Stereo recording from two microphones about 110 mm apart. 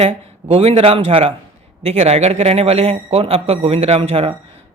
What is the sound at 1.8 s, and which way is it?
Speech, 70° right (ahead or behind).